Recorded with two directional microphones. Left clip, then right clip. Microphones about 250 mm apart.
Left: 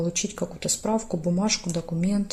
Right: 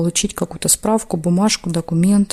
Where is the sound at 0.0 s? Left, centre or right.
Right.